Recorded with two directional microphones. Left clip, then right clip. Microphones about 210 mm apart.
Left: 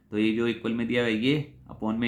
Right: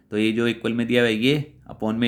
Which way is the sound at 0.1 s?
50° right (ahead or behind).